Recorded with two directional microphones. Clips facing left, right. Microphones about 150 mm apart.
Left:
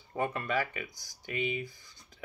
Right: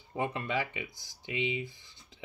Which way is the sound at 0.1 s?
20° right (ahead or behind).